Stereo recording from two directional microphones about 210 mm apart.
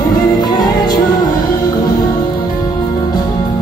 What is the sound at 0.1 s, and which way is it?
Music, 20° left (ahead or behind).